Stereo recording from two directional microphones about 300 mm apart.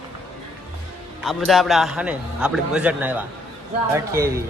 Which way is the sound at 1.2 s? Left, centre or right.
Centre.